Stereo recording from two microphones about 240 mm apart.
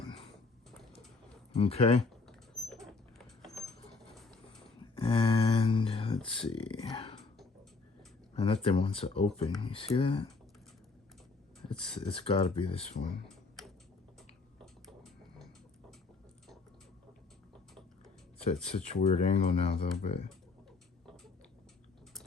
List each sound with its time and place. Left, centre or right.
1.5 s speech: left
2.2 s rodents: centre
4.1 s a sound: centre
4.9 s a sound: left
6.6 s speech: left
8.4 s speech: left
11.7 s speech: left
13.2 s typing: centre
14.6 s a sound: centre
18.4 s speech: left